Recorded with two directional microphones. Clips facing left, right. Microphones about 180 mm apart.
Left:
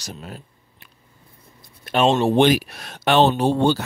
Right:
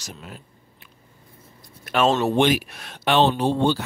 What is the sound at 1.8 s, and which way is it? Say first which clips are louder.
Speech: left 2 dB; 25° left (ahead or behind).